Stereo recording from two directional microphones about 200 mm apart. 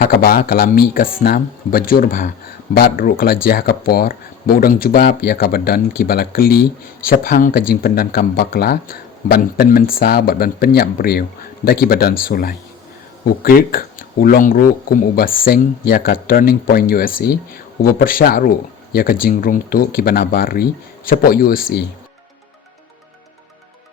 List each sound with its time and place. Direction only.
0.2 s speech: 45° left (ahead or behind)